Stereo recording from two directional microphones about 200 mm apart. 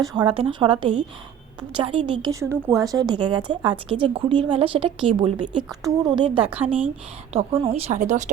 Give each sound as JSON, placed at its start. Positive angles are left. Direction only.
{"t": 0.0, "sound": "a woman's voice", "side_deg": -20}
{"t": 6.5, "sound": "speech", "side_deg": -10}
{"t": 7.3, "sound": "speech", "side_deg": -30}